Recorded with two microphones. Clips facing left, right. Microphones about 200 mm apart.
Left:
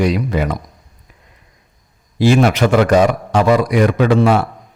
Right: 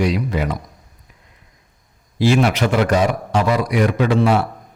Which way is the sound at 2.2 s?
50° left (ahead or behind).